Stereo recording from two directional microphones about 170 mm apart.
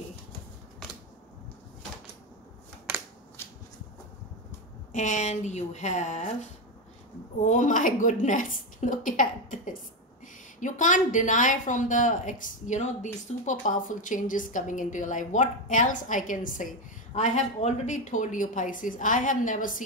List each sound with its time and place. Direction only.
3.4 s a sound: 15° left (ahead or behind)
4.9 s a woman's voice: 45° left (ahead or behind)
7.4 s a woman's voice: 50° left (ahead or behind)